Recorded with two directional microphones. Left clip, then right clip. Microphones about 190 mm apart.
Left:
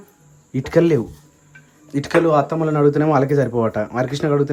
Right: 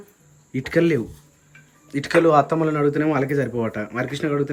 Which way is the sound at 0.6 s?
30° left (ahead or behind).